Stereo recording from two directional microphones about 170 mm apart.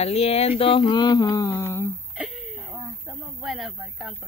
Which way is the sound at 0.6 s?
30° left (ahead or behind).